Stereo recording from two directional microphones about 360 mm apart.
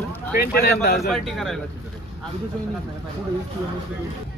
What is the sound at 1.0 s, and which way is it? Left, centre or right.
Speech, centre.